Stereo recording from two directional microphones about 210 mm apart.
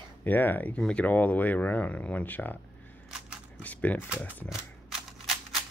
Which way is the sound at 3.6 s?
5° left (ahead or behind).